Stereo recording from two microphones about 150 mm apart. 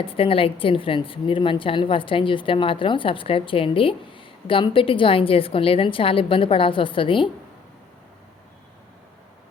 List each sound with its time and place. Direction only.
0.0 s a woman's voice: 35° left (ahead or behind)